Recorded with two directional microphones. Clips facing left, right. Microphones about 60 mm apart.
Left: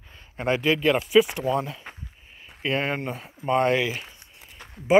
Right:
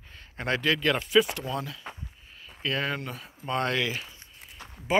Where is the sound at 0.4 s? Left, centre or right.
Centre.